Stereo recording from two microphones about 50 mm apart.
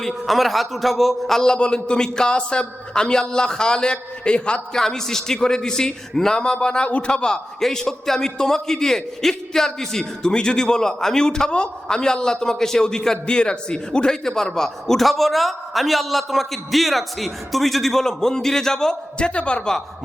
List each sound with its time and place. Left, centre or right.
0.1 s a man's voice: centre
1.5 s a man's voice: centre
4.7 s a man's voice: centre